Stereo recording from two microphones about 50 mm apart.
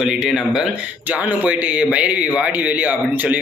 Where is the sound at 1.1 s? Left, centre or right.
Right.